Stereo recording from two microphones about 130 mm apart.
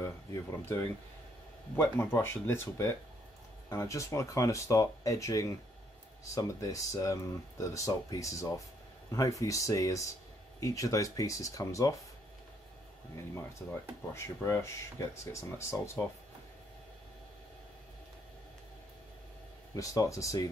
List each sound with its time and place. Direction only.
0.0 s speech: 20° left (ahead or behind)
1.8 s speech: 15° left (ahead or behind)
13.1 s speech: 20° left (ahead or behind)
19.7 s speech: 25° left (ahead or behind)